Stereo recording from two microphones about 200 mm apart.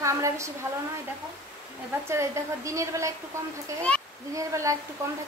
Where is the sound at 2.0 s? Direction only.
15° right (ahead or behind).